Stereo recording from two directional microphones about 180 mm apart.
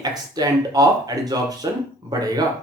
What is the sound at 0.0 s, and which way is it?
Speech, 20° right (ahead or behind).